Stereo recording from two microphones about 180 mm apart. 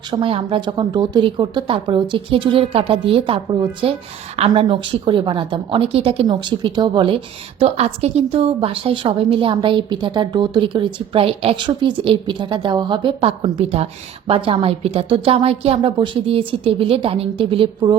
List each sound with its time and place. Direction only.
0.1 s a woman's voice: 30° right (ahead or behind)